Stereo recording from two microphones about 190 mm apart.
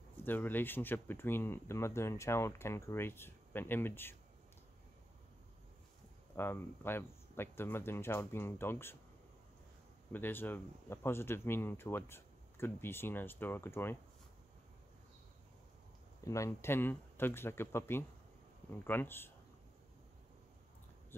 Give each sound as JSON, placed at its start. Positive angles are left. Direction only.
{"t": 0.2, "sound": "speech", "side_deg": 10}
{"t": 6.3, "sound": "speech", "side_deg": 10}
{"t": 10.1, "sound": "speech", "side_deg": 10}
{"t": 16.3, "sound": "speech", "side_deg": 15}